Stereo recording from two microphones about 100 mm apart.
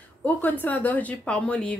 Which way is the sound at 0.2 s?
15° left (ahead or behind).